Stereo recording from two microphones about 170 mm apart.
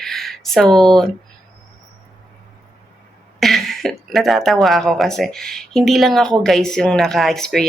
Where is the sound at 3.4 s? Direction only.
Centre (ahead or behind).